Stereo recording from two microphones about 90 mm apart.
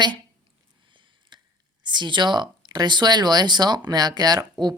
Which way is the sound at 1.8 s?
55° right (ahead or behind).